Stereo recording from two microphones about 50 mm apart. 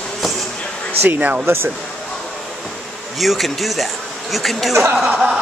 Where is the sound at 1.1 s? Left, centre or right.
Right.